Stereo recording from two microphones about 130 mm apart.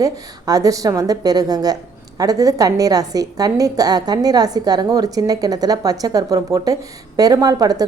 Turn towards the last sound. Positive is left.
turn(degrees=-30)  # may be behind; listen again after turning